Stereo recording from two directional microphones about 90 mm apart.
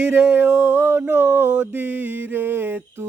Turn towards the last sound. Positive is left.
turn(degrees=-25)  # may be behind; listen again after turning